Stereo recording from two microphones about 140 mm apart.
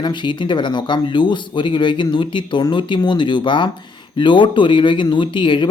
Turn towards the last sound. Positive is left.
turn(degrees=35)  # may be behind; listen again after turning